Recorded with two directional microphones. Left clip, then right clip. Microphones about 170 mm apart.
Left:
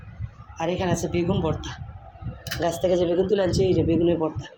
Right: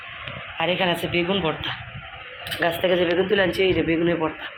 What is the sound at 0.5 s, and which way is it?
Speech, 15° left (ahead or behind).